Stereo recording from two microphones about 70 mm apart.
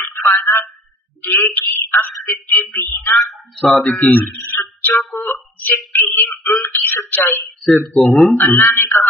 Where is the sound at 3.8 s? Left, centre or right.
Left.